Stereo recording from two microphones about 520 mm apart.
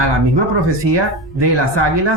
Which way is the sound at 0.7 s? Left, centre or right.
Right.